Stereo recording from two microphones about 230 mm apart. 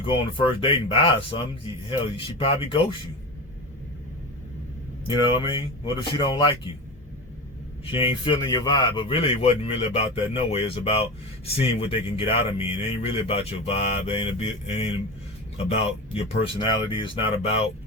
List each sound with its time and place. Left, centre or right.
0.0 s speech: left
5.0 s speech: left
7.9 s speech: left